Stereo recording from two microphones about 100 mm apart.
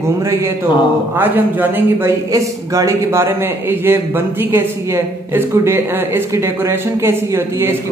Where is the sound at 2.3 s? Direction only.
35° right (ahead or behind).